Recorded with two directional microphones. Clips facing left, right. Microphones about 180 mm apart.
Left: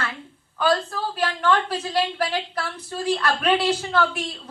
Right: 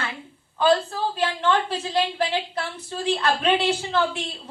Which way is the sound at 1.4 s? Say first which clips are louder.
Left 2 dB; 25° right (ahead or behind).